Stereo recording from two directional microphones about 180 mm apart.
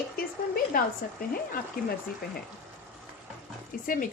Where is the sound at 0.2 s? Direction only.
55° left (ahead or behind).